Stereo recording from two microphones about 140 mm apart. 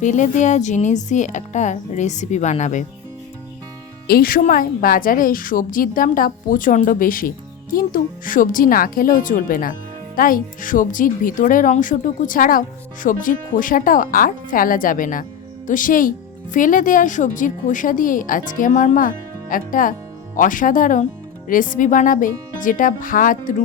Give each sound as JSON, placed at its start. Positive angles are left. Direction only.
{"t": 0.0, "sound": "speech", "side_deg": 60}
{"t": 4.0, "sound": "speech", "side_deg": 90}